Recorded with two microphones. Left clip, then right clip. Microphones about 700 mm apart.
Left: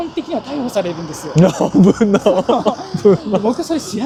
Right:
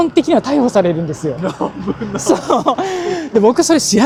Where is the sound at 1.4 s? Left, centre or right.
Left.